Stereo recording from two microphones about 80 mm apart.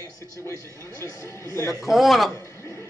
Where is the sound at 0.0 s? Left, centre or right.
Left.